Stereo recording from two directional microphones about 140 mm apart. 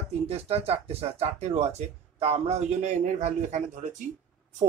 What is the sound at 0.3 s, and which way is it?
Speech, 45° right (ahead or behind).